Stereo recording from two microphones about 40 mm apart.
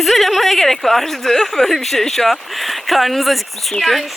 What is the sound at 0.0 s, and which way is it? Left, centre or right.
Speech, centre.